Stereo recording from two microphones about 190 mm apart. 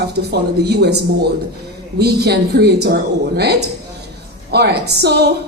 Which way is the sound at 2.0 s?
60° right (ahead or behind).